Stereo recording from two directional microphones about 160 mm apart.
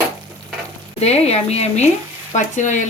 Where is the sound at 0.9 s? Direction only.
40° left (ahead or behind).